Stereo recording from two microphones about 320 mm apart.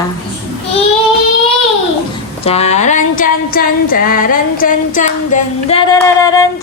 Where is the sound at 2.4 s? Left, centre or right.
Centre.